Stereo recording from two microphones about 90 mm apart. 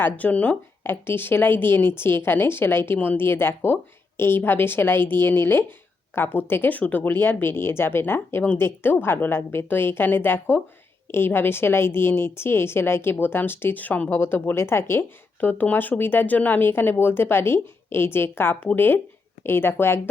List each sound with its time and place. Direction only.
0.0 s a woman's voice: 20° left (ahead or behind)